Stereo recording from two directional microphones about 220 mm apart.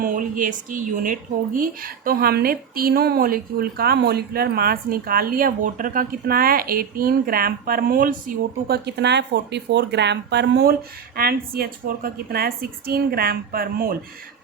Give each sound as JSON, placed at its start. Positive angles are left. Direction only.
{"t": 0.0, "sound": "speech", "side_deg": -40}